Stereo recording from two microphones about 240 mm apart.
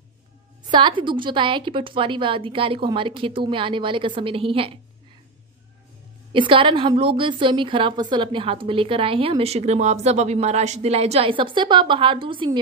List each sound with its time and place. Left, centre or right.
0.7 s a woman's voice: centre
6.3 s a woman's voice: right